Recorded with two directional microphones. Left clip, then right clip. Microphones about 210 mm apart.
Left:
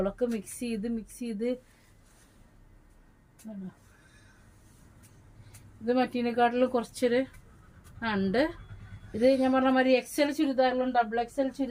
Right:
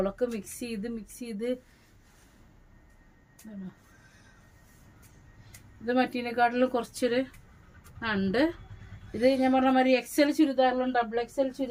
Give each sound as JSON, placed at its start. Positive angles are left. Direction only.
{"t": 0.0, "sound": "speech", "side_deg": -20}
{"t": 5.8, "sound": "speech", "side_deg": -20}